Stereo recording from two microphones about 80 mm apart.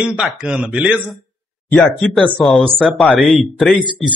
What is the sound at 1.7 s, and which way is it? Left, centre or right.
Speech, centre.